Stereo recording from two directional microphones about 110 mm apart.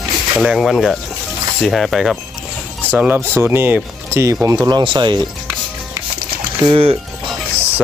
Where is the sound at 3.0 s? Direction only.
20° right (ahead or behind).